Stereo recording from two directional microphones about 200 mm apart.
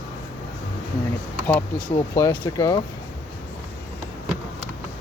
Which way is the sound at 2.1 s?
15° left (ahead or behind).